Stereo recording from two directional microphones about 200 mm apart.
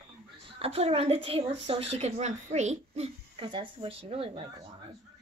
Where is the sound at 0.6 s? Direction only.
30° right (ahead or behind).